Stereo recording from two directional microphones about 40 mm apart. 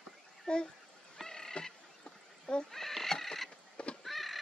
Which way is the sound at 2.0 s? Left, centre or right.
Left.